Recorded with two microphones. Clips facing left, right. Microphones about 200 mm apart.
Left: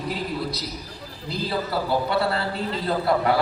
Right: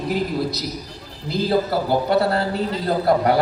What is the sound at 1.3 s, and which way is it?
A man's voice, 45° right (ahead or behind).